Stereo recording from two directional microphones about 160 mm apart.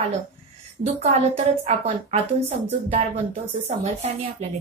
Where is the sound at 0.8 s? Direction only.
45° right (ahead or behind).